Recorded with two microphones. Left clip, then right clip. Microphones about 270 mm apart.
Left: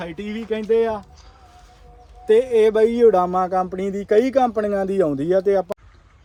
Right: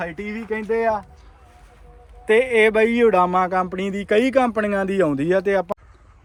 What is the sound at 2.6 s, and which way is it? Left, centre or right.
A man's voice, right.